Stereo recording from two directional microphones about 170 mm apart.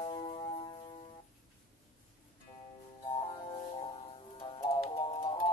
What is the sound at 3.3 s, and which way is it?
Music, 30° left (ahead or behind).